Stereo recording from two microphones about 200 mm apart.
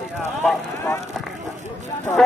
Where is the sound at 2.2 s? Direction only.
5° left (ahead or behind).